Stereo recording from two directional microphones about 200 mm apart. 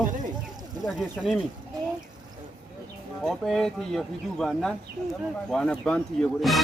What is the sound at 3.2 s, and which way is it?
Speech, centre (ahead or behind).